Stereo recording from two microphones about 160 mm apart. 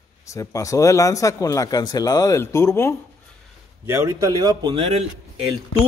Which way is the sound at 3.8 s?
20° right (ahead or behind).